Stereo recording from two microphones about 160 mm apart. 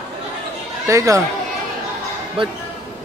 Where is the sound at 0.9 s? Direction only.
20° right (ahead or behind).